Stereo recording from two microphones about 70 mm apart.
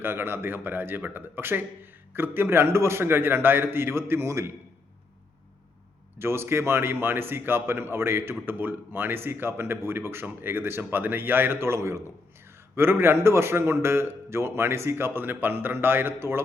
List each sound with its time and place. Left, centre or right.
0.0 s a man's voice: right
6.1 s a man's voice: right